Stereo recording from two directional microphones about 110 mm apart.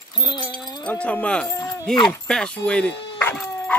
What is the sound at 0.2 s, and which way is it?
Speech, 45° left (ahead or behind).